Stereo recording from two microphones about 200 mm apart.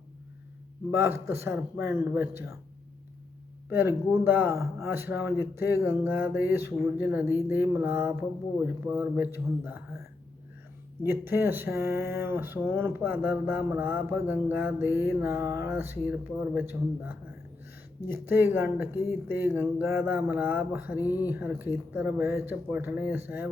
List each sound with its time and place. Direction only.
0.9 s speech: 10° right (ahead or behind)
3.7 s speech: 10° right (ahead or behind)
11.0 s speech: 10° right (ahead or behind)
21.0 s speech: 15° left (ahead or behind)
21.2 s speech: 10° right (ahead or behind)